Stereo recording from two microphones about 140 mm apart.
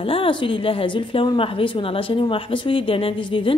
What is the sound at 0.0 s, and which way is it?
Speech, 40° left (ahead or behind).